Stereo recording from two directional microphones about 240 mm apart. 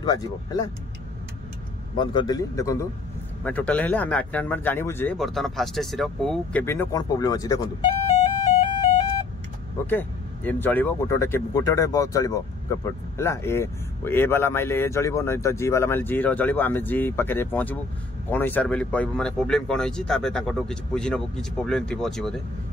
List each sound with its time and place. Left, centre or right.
0.0 s speech: centre
2.0 s speech: centre
9.8 s speech: centre